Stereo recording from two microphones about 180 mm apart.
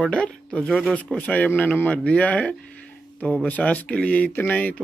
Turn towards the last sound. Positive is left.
turn(degrees=10)  # may be behind; listen again after turning